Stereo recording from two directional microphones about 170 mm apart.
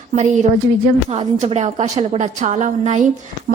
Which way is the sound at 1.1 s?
35° right (ahead or behind).